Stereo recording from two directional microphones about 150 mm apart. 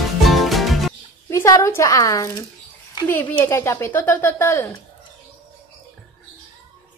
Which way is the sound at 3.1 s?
10° left (ahead or behind).